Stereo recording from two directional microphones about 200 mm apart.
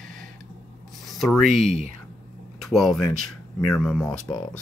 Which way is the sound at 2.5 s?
Centre (ahead or behind).